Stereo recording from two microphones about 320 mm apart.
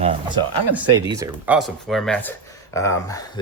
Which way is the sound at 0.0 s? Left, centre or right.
Centre.